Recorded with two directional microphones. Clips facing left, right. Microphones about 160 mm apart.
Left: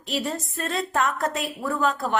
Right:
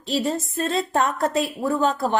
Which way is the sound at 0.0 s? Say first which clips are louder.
Right 4 dB; 30° right (ahead or behind).